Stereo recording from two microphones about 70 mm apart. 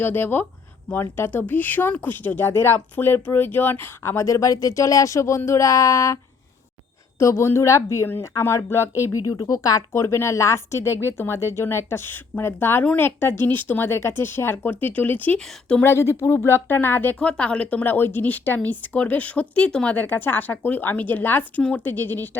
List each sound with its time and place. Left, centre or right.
0.0 s speech: left
2.5 s speech: left
7.2 s speech: left
9.5 s speech: left
15.8 s speech: left
17.2 s speech: centre
20.1 s speech: left